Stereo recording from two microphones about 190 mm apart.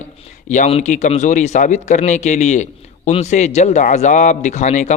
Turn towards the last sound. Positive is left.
turn(degrees=40)  # may be behind; listen again after turning